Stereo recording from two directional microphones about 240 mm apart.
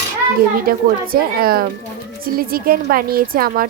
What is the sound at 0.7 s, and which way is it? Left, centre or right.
A woman's voice, right.